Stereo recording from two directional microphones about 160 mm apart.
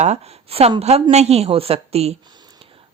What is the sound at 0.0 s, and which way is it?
A woman's voice, 40° right (ahead or behind).